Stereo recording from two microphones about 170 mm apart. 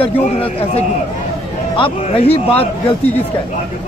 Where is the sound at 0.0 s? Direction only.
35° left (ahead or behind).